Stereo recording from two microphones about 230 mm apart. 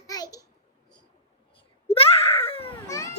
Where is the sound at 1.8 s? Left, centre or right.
Left.